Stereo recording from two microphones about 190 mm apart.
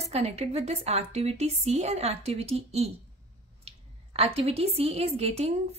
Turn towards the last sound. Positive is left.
turn(degrees=-35)  # may be behind; listen again after turning